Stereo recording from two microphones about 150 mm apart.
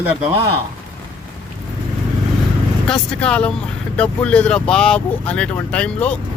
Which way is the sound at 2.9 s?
5° left (ahead or behind).